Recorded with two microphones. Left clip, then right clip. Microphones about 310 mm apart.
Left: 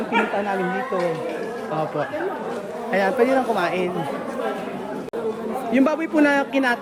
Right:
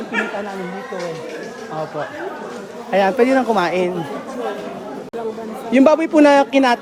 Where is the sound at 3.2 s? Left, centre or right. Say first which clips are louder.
Right 4 dB; right.